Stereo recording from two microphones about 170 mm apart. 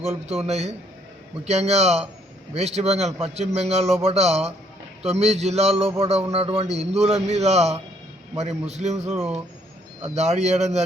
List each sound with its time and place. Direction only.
0.3 s a man's voice: 40° right (ahead or behind)